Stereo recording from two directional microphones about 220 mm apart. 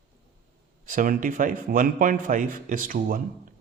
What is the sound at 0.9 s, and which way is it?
A man's voice, 40° right (ahead or behind).